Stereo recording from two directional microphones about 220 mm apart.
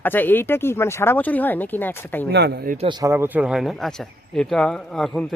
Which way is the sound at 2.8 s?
20° right (ahead or behind).